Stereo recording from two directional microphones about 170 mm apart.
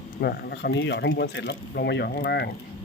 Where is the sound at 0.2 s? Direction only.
70° left (ahead or behind).